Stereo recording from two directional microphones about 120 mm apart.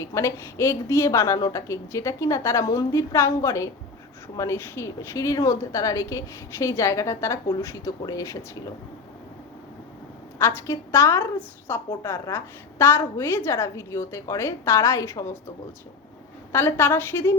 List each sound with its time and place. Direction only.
0.0 s a woman's voice: 25° left (ahead or behind)
10.3 s a woman's voice: 20° left (ahead or behind)
16.5 s a woman's voice: 20° left (ahead or behind)